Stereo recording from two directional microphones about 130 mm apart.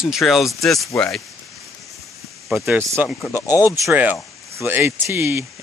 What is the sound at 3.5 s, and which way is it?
Speech, 25° left (ahead or behind).